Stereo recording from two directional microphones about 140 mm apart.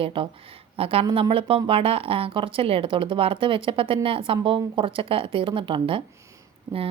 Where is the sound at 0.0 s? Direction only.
40° right (ahead or behind).